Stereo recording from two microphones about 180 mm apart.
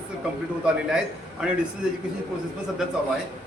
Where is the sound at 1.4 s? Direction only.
5° right (ahead or behind).